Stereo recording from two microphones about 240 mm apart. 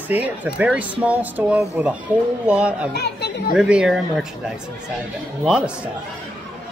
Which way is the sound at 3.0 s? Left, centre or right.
Left.